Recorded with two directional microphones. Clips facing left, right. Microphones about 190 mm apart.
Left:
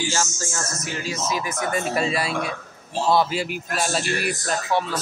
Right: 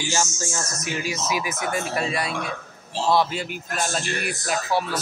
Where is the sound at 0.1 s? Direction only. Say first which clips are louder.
Right 1 dB; 15° right (ahead or behind); by 4.4 s 5° left (ahead or behind).